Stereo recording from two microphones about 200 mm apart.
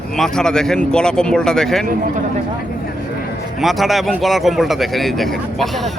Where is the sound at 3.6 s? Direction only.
Centre (ahead or behind).